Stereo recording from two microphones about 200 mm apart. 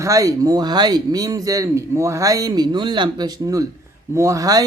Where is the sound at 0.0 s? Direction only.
15° right (ahead or behind).